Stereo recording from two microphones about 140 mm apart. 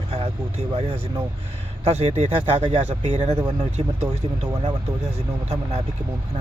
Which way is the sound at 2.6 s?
35° right (ahead or behind).